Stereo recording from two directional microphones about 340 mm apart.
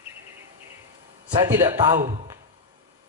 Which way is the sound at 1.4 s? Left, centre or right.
Centre.